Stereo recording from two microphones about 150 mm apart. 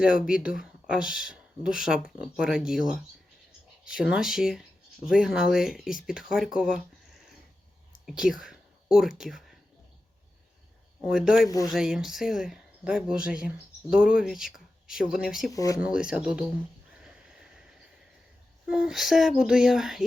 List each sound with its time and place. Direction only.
0.0 s speech: 5° right (ahead or behind)
3.8 s speech: 5° right (ahead or behind)
8.0 s speech: 5° right (ahead or behind)
11.0 s speech: 5° right (ahead or behind)
11.4 s speech: 25° left (ahead or behind)
11.7 s speech: 5° right (ahead or behind)
15.5 s speech: 25° left (ahead or behind)
15.8 s speech: 5° right (ahead or behind)
17.0 s horse: 5° right (ahead or behind)
18.7 s speech: 5° right (ahead or behind)